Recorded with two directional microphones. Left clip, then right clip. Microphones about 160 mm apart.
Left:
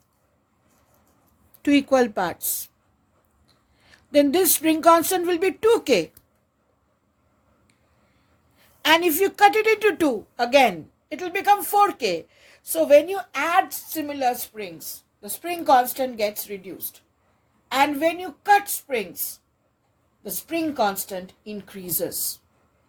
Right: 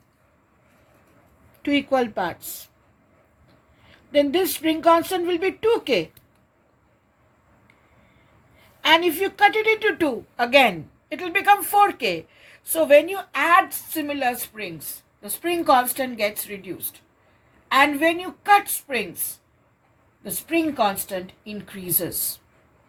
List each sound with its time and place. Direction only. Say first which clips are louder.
1.6 s speech: left 2 dB; 90° left
3.8 s speech: left 1 dB; 90° left
8.8 s a woman's voice: even; 90° left; by 19.0 s 60° left (ahead or behind)
20.5 s a woman's voice: right 2 dB; 65° left (ahead or behind)